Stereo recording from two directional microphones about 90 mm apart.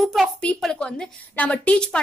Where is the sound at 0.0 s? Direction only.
Centre (ahead or behind).